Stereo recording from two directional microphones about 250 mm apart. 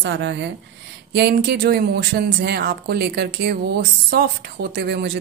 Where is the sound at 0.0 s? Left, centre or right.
Right.